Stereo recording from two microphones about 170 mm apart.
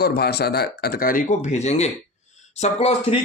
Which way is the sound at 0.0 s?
70° left (ahead or behind).